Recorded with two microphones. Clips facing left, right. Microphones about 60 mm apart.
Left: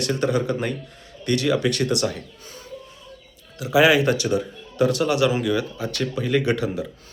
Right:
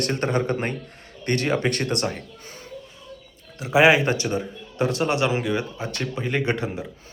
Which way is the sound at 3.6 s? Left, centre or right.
Right.